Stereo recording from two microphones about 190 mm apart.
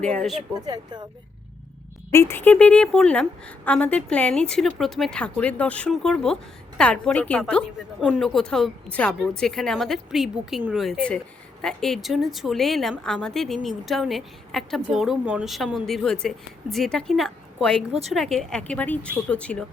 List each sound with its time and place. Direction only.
0.0 s a woman's voice: 5° left (ahead or behind)
0.6 s speech: 20° right (ahead or behind)
2.0 s a woman's voice: 15° left (ahead or behind)
17.7 s speech: 30° right (ahead or behind)
18.1 s a woman's voice: centre (ahead or behind)